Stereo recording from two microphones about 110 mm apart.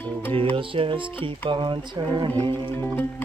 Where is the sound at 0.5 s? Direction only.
55° right (ahead or behind).